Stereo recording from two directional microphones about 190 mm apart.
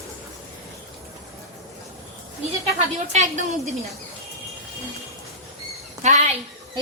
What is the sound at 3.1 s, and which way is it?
Speech, 40° right (ahead or behind).